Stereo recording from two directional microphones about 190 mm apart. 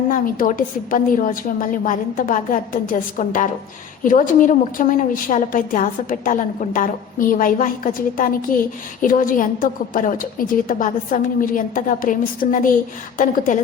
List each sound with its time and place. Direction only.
0.1 s a woman's voice: 45° left (ahead or behind)